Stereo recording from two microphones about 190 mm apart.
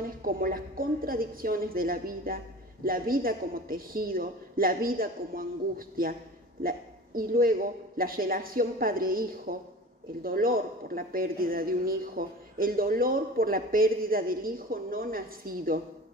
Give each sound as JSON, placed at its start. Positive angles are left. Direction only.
{"t": 0.2, "sound": "a woman's voice", "side_deg": -50}